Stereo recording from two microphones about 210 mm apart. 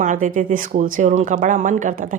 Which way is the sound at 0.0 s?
35° right (ahead or behind).